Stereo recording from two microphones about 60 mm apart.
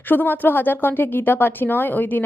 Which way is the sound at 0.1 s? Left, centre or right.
Left.